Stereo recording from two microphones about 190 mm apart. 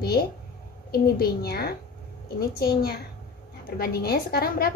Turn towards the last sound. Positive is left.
turn(degrees=55)  # may be behind; listen again after turning